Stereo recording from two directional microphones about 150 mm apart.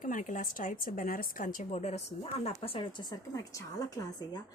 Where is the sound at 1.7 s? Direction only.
45° left (ahead or behind); by 4.4 s 25° left (ahead or behind).